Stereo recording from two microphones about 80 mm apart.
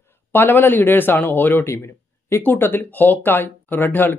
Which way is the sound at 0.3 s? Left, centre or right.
Left.